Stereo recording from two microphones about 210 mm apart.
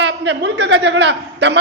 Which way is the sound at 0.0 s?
55° right (ahead or behind).